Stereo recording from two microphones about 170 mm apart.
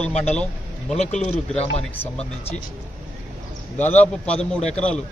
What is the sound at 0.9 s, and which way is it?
Speech, 40° left (ahead or behind).